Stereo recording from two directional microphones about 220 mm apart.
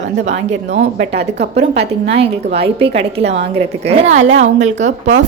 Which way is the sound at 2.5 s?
25° right (ahead or behind).